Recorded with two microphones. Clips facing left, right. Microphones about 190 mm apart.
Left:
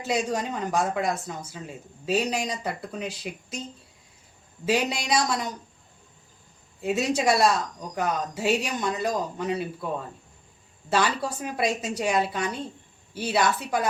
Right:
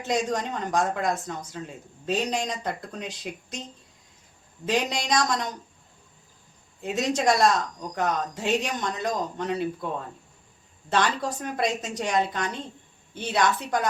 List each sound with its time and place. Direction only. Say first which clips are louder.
0.0 s speech: even; centre (ahead or behind)
6.8 s speech: even; centre (ahead or behind)
10.8 s a woman's voice: even; 5° left (ahead or behind)